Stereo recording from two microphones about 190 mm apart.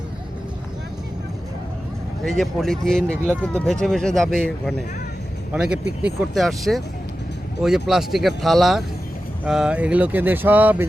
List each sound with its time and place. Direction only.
2.2 s speech: centre (ahead or behind)
5.8 s speech: 65° right (ahead or behind)
6.3 s speech: centre (ahead or behind)